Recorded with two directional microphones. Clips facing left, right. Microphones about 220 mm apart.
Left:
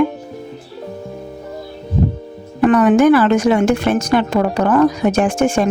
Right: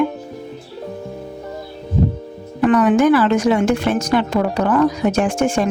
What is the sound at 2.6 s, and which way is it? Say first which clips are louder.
Speech: left 2 dB; 45° left (ahead or behind).